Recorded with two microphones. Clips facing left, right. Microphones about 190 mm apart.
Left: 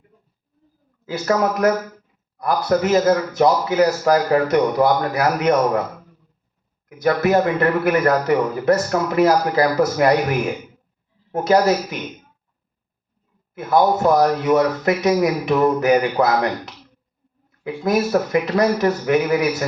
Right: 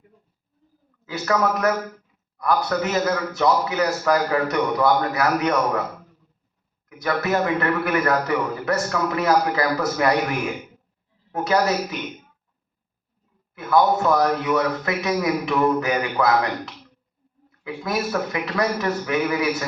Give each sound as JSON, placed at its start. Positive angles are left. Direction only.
{"t": 1.1, "sound": "a man's voice", "side_deg": 35}
{"t": 6.8, "sound": "a man's voice", "side_deg": 40}
{"t": 11.3, "sound": "a man's voice", "side_deg": 40}
{"t": 13.6, "sound": "a man's voice", "side_deg": 35}